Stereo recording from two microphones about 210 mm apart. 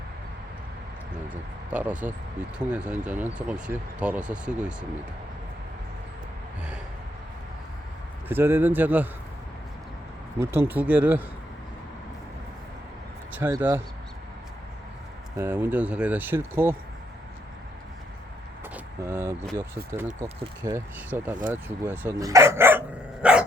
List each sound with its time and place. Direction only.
1.7 s speech: 5° right (ahead or behind)
8.3 s speech: 10° right (ahead or behind)
10.4 s speech: 10° right (ahead or behind)
13.3 s speech: 10° right (ahead or behind)
15.4 s speech: 10° right (ahead or behind)
18.6 s speech: 10° right (ahead or behind)
20.1 s speech: 30° right (ahead or behind)
20.6 s speech: 10° right (ahead or behind)
23.2 s dog: 5° right (ahead or behind)